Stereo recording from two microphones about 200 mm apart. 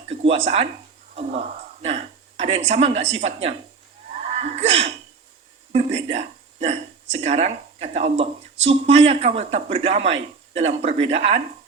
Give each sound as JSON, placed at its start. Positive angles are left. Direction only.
{"t": 0.1, "sound": "a man's voice", "side_deg": -30}